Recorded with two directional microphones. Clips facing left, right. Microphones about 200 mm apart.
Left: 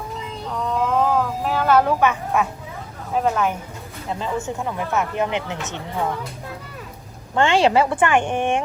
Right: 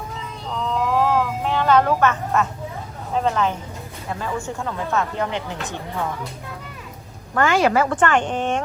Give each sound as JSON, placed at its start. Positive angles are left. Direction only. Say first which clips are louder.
{"t": 0.8, "sound": "a sound", "louder": "even", "side_deg": 0}
{"t": 3.1, "sound": "a woman's voice", "louder": "left 1 dB", "side_deg": 5}
{"t": 4.1, "sound": "speech", "louder": "left 2 dB", "side_deg": 20}
{"t": 7.3, "sound": "speech", "louder": "left 1 dB", "side_deg": 30}
{"t": 7.9, "sound": "a woman's voice", "louder": "left 1 dB", "side_deg": 10}